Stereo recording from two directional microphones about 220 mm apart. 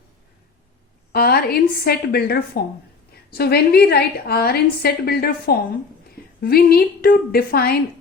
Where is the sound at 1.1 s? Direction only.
45° left (ahead or behind).